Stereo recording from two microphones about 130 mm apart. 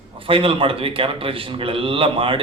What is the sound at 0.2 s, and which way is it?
A man's voice, 45° right (ahead or behind).